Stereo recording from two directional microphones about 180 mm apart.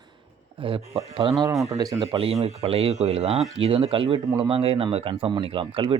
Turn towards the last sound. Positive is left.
turn(degrees=-30)  # may be behind; listen again after turning